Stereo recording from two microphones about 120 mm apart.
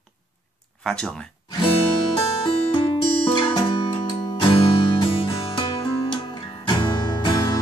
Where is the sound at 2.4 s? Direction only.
45° left (ahead or behind).